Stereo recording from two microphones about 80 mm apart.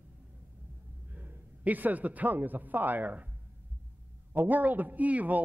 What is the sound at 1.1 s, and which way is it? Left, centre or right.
A man's voice, right.